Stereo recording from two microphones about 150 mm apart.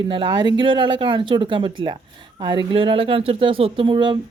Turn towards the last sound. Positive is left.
turn(degrees=-35)  # may be behind; listen again after turning